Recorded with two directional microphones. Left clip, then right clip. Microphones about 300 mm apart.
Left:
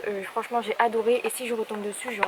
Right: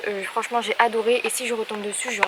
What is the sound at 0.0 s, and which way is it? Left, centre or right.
Speech, centre.